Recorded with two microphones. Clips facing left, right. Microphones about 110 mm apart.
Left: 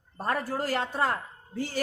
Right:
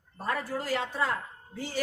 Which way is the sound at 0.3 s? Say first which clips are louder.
Left 2 dB; 45° left (ahead or behind).